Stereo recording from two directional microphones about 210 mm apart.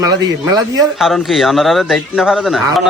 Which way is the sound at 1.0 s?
Centre (ahead or behind).